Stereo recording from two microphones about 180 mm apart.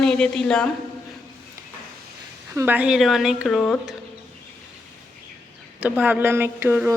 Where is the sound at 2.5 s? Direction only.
10° right (ahead or behind).